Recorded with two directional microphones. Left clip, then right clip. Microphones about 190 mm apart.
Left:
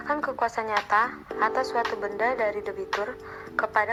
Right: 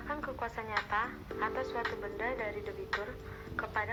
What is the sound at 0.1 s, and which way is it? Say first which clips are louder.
A woman's voice: left 12 dB; 55° left (ahead or behind).